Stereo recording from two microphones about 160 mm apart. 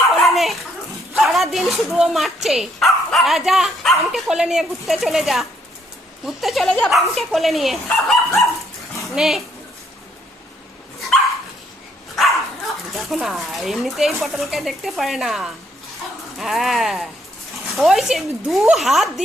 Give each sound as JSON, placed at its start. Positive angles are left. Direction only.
{"t": 0.1, "sound": "dog", "side_deg": 0}
{"t": 1.1, "sound": "speech", "side_deg": 0}
{"t": 12.9, "sound": "speech", "side_deg": 0}